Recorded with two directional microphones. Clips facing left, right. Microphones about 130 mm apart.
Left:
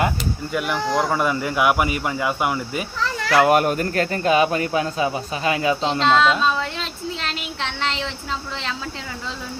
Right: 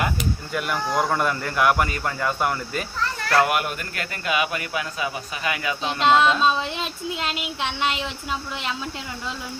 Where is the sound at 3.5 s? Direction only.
40° left (ahead or behind).